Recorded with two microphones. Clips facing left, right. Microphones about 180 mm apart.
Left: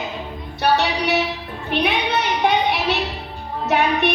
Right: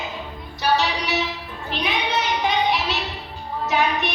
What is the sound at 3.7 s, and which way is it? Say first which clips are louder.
Music: left 4 dB; 60° left (ahead or behind).